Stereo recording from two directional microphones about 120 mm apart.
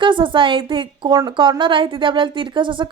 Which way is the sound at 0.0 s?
40° right (ahead or behind).